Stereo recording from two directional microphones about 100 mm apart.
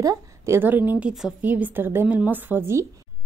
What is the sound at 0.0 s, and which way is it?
Speech, 35° right (ahead or behind).